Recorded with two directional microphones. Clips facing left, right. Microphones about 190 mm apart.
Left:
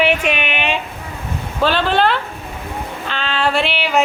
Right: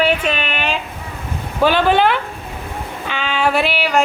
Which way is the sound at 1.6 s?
15° right (ahead or behind).